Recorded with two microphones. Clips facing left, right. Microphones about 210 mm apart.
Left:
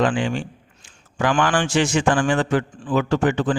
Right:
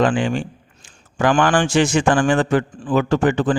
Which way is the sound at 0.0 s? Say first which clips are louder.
Right 3 dB; 50° right (ahead or behind).